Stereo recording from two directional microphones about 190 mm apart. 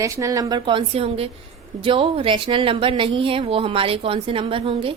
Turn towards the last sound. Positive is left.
turn(degrees=-30)  # may be behind; listen again after turning